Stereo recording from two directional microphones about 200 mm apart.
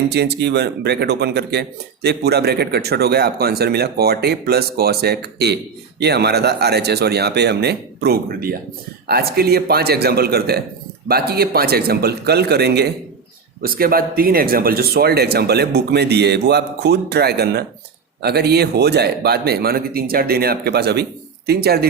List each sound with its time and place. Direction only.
0.1 s speech: 55° right (ahead or behind)